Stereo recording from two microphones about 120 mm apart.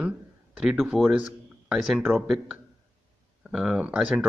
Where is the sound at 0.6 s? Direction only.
10° right (ahead or behind).